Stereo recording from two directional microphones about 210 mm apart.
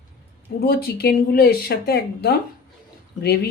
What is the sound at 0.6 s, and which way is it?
Speech, 45° left (ahead or behind).